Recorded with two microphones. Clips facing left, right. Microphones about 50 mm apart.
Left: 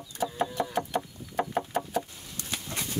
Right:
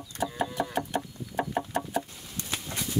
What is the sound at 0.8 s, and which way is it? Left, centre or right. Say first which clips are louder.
Chicken: left 1 dB; centre.